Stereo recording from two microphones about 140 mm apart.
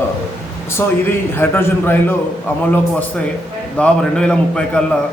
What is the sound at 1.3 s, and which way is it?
Speech, 15° left (ahead or behind).